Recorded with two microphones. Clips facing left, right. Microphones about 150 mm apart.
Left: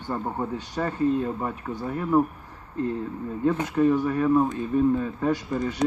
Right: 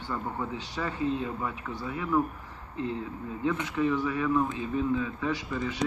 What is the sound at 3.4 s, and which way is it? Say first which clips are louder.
Speech: left 6 dB; 45° left (ahead or behind).